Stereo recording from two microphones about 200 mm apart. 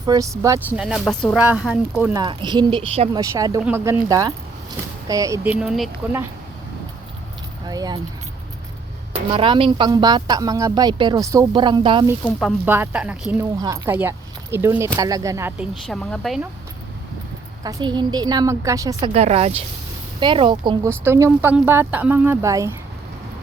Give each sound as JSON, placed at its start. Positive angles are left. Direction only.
{"t": 0.0, "sound": "speech", "side_deg": -20}
{"t": 0.8, "sound": "speech", "side_deg": -5}
{"t": 2.1, "sound": "speech", "side_deg": -20}
{"t": 3.1, "sound": "speech", "side_deg": -15}
{"t": 7.7, "sound": "speech", "side_deg": -20}
{"t": 9.3, "sound": "speech", "side_deg": -25}
{"t": 12.2, "sound": "speech", "side_deg": 5}
{"t": 12.6, "sound": "speech", "side_deg": -10}
{"t": 15.9, "sound": "speech", "side_deg": 0}
{"t": 17.6, "sound": "speech", "side_deg": -20}
{"t": 21.0, "sound": "speech", "side_deg": -10}